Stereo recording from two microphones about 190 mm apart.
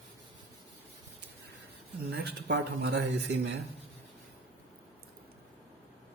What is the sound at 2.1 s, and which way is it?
Speech, 60° right (ahead or behind).